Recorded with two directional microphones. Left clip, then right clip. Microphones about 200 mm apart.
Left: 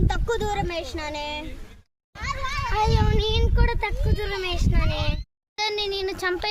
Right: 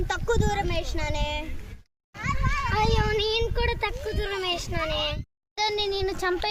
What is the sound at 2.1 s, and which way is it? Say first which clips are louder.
Children playing: even; 40° left (ahead or behind).